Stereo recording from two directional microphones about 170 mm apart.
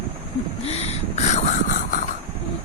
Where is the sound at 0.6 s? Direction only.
40° left (ahead or behind).